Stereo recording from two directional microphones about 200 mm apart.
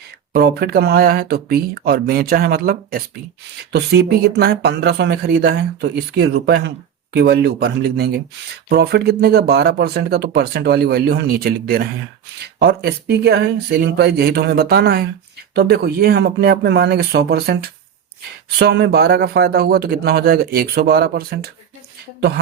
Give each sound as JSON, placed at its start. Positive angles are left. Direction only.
{"t": 0.3, "sound": "speech", "side_deg": -50}